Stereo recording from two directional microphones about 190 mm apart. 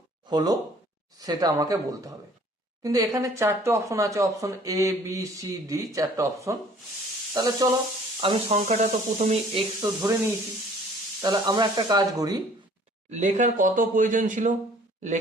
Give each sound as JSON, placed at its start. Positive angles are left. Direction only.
{"t": 0.3, "sound": "speech", "side_deg": -20}
{"t": 8.4, "sound": "speech", "side_deg": -40}
{"t": 9.8, "sound": "speech", "side_deg": -20}
{"t": 13.1, "sound": "speech", "side_deg": -40}